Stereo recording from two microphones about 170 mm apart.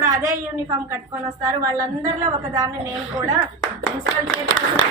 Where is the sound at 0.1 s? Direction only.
20° right (ahead or behind).